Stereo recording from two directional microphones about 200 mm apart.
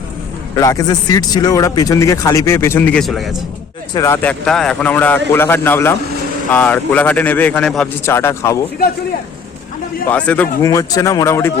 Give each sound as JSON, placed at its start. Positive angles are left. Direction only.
{"t": 0.5, "sound": "speech", "side_deg": 15}
{"t": 3.9, "sound": "speech", "side_deg": 15}
{"t": 10.1, "sound": "speech", "side_deg": 5}